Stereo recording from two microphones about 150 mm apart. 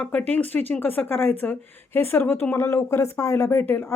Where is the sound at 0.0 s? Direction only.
10° left (ahead or behind).